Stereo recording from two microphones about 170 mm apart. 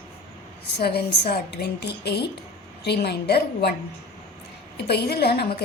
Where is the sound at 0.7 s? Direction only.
75° left (ahead or behind).